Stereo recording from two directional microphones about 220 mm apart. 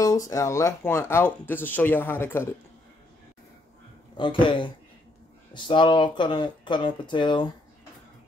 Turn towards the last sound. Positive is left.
turn(degrees=20)  # may be behind; listen again after turning